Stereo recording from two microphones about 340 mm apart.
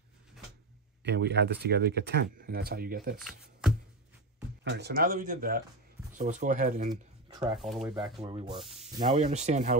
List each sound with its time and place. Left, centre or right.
1.0 s speech: right
3.2 s speech: centre
4.6 s speech: right
7.5 s speech: centre
8.2 s rub: centre
8.8 s speech: centre